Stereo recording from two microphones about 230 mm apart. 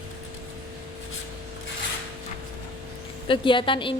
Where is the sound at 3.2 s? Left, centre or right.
Left.